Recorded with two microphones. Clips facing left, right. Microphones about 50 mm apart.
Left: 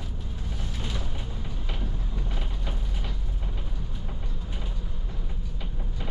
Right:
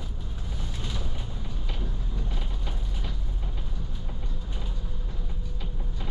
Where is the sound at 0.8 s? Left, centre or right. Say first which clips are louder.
Left 2 dB; centre.